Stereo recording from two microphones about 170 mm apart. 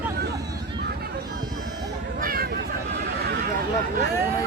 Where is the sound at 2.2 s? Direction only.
60° right (ahead or behind).